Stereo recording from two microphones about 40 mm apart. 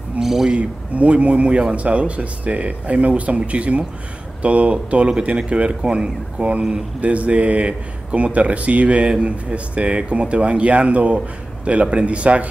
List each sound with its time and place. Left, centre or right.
0.2 s speech: centre
0.6 s speech: right